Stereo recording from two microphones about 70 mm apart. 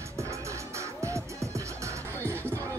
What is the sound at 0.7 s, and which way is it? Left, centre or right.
Music, right.